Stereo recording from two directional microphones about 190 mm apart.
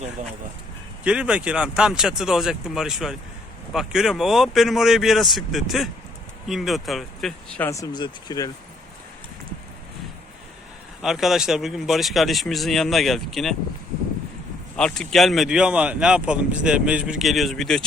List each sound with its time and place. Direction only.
1.0 s speech: 5° right (ahead or behind)
7.7 s speech: 20° left (ahead or behind)
11.0 s speech: centre (ahead or behind)
14.8 s speech: 5° left (ahead or behind)